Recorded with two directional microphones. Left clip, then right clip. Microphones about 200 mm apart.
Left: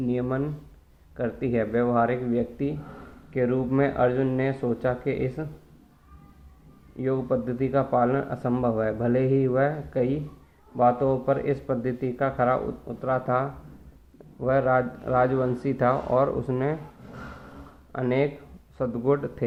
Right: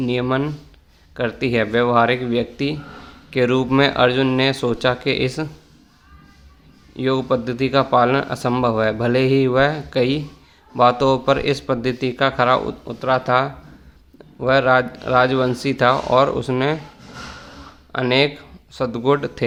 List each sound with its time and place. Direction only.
0.0 s speech: 35° right (ahead or behind)
7.0 s speech: 35° right (ahead or behind)
17.9 s speech: 20° right (ahead or behind)